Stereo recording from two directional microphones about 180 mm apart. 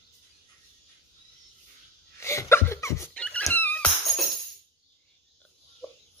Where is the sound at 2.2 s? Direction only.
15° left (ahead or behind).